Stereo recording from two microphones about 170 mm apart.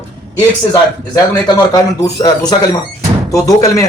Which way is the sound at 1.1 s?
20° left (ahead or behind).